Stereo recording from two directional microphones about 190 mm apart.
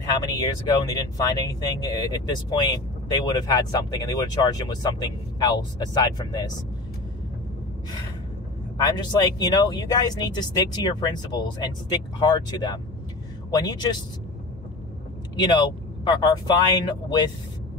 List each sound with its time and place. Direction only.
0.2 s speech: 20° left (ahead or behind)
8.7 s speech: 20° left (ahead or behind)
15.5 s speech: 25° left (ahead or behind)